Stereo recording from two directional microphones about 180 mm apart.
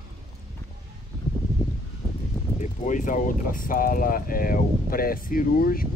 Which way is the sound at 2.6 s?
45° left (ahead or behind).